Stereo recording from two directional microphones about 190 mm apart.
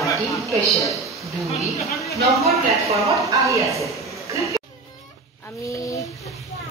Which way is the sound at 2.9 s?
15° right (ahead or behind).